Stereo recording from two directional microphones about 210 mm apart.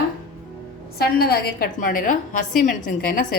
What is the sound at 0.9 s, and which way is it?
A woman's voice, 50° left (ahead or behind).